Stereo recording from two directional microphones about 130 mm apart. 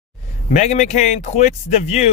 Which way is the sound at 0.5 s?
65° left (ahead or behind).